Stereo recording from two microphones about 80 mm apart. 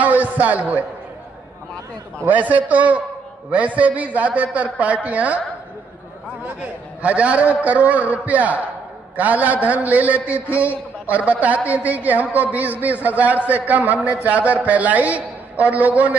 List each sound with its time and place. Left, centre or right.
0.0 s speech: centre
2.2 s a man's voice: centre
6.4 s a man's voice: centre